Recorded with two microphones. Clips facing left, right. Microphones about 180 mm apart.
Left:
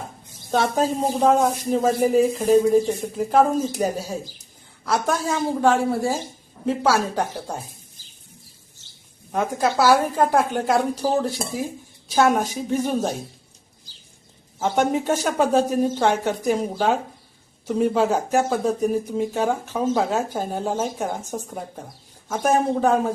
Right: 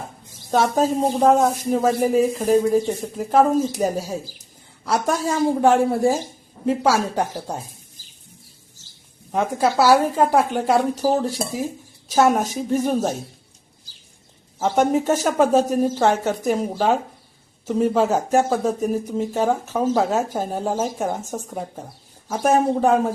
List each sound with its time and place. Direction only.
0.9 s a woman's voice: 5° right (ahead or behind)
9.3 s a woman's voice: 5° right (ahead or behind)
14.6 s speech: 5° right (ahead or behind)